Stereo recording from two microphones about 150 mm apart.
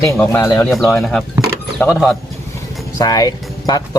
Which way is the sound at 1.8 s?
15° left (ahead or behind).